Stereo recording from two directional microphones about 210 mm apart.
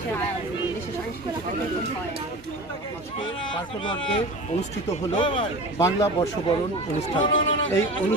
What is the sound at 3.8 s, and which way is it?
Speech, 25° left (ahead or behind).